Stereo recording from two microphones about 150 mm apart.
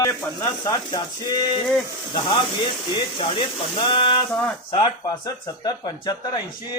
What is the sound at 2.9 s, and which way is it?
Speech, 30° left (ahead or behind).